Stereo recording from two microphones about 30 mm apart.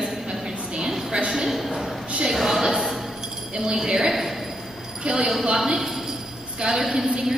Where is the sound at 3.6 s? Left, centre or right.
Right.